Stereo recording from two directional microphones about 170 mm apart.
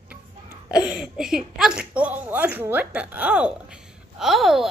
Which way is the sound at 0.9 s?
5° right (ahead or behind).